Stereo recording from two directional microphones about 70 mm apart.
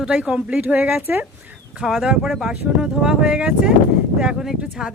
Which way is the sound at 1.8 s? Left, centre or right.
Centre.